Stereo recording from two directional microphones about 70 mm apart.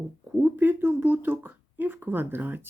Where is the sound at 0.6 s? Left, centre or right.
Right.